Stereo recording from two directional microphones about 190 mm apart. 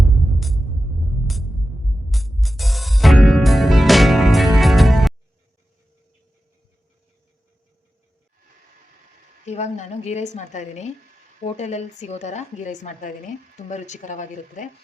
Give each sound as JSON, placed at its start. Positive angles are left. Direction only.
{"t": 0.3, "sound": "music", "side_deg": 0}
{"t": 2.0, "sound": "music", "side_deg": 0}
{"t": 9.5, "sound": "a woman's voice", "side_deg": 35}